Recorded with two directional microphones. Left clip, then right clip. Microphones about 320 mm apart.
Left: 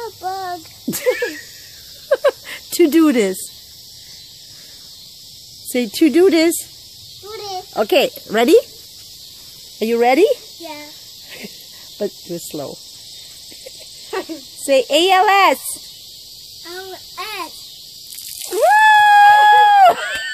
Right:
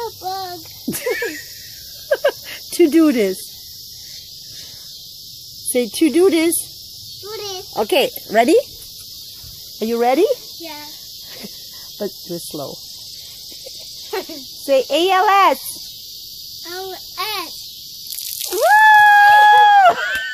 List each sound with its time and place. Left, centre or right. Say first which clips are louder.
0.0 s a sound: even; centre
2.0 s cricket: left 2 dB; centre
5.7 s speech: left 1 dB; centre
7.7 s speech: left 2 dB; centre
9.8 s speech: left 2 dB; centre
12.0 s speech: left 2 dB; centre
14.1 s cricket: left 1 dB; centre
14.7 s speech: left 2 dB; centre
17.2 s a sound: right 3 dB; centre
18.6 s a sound: right 1 dB; centre